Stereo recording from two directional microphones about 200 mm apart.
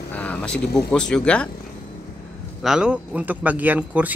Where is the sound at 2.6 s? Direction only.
5° right (ahead or behind).